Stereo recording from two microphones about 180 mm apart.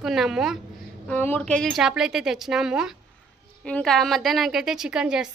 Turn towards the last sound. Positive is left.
turn(degrees=-5)  # may be behind; listen again after turning